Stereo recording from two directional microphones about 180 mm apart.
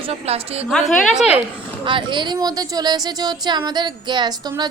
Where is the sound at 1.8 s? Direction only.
25° right (ahead or behind).